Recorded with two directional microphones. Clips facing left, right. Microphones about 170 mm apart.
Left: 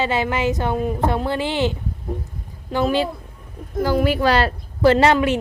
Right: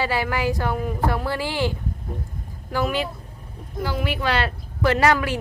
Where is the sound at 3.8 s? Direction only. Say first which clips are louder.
Left 7 dB; 40° left (ahead or behind); by 5.4 s 25° left (ahead or behind).